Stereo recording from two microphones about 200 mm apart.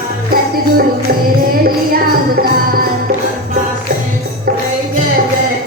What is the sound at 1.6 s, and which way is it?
Music, 45° right (ahead or behind).